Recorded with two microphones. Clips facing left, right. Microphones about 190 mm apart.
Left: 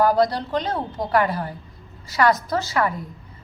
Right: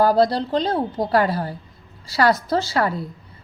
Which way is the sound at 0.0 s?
30° right (ahead or behind).